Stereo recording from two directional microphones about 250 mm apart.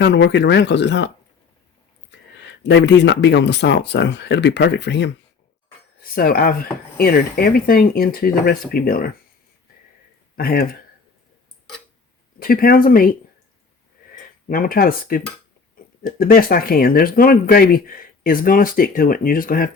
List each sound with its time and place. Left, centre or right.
0.0 s speech: left
2.4 s speech: left
10.3 s speech: left
12.4 s speech: left
14.5 s speech: left